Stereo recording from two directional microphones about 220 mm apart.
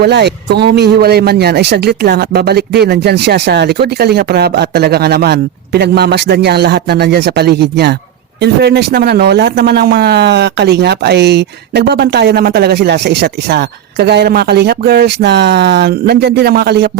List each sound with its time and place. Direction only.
0.0 s speech: 50° right (ahead or behind)